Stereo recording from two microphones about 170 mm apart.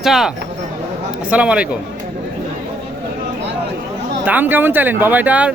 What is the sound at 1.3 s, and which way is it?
Speech, 5° right (ahead or behind).